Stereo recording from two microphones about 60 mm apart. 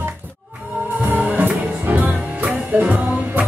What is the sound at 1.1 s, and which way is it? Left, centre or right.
Music, right.